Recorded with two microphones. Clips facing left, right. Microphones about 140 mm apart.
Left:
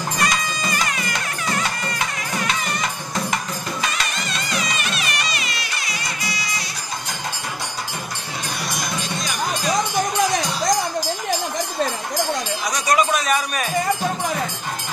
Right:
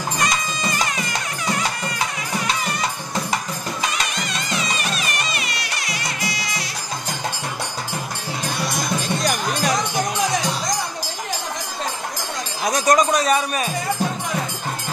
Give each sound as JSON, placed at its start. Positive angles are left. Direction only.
{"t": 0.2, "sound": "music", "side_deg": -20}
{"t": 4.5, "sound": "music", "side_deg": -25}
{"t": 4.9, "sound": "music", "side_deg": -45}
{"t": 12.6, "sound": "music", "side_deg": -50}